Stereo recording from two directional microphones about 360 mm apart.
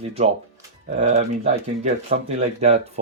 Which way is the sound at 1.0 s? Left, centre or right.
Centre.